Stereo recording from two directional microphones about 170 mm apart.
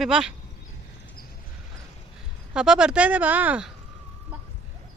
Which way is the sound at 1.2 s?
60° left (ahead or behind).